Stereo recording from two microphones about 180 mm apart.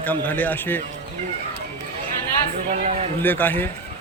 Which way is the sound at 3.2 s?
10° left (ahead or behind).